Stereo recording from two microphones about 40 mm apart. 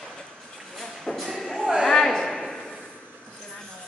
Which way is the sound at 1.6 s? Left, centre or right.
Centre.